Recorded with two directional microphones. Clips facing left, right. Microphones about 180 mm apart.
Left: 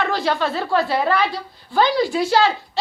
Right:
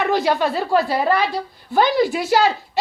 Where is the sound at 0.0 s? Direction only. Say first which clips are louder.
Right 3 dB; 15° right (ahead or behind).